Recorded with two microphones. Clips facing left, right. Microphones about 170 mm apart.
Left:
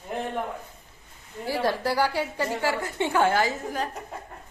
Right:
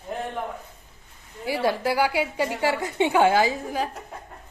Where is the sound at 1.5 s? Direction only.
10° right (ahead or behind).